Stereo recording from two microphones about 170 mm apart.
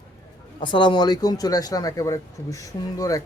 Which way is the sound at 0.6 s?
25° left (ahead or behind).